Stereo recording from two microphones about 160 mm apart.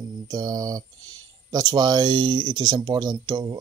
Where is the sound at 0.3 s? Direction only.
25° right (ahead or behind).